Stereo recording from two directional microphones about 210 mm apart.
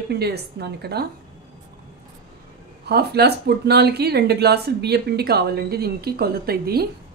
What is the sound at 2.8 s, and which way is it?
Speech, 50° right (ahead or behind).